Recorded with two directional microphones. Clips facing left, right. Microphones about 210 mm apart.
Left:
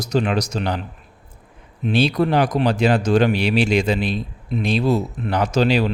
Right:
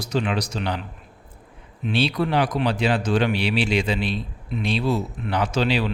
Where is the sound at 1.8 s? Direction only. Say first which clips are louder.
Left 4 dB; 45° left (ahead or behind).